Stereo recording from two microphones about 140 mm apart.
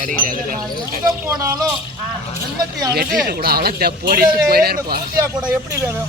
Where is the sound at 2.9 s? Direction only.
90° right.